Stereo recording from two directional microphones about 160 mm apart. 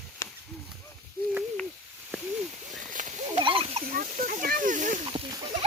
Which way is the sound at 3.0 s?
50° right (ahead or behind).